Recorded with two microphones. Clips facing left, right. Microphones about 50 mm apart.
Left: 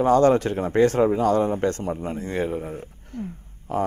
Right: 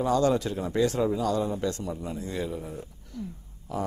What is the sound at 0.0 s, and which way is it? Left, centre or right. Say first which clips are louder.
A man's voice: left 7 dB; left.